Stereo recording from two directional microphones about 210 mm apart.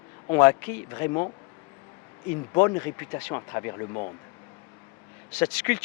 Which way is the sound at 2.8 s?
10° left (ahead or behind).